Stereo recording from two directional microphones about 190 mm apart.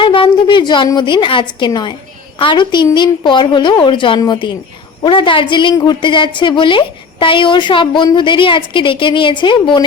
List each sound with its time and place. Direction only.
0.0 s a woman's voice: 25° left (ahead or behind)